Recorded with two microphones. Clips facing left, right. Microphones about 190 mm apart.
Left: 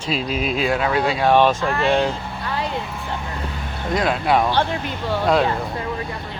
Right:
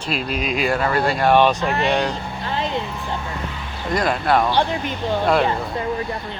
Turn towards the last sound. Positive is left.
turn(degrees=-15)  # may be behind; listen again after turning